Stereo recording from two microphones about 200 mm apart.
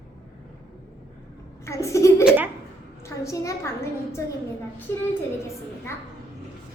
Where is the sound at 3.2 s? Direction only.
15° left (ahead or behind).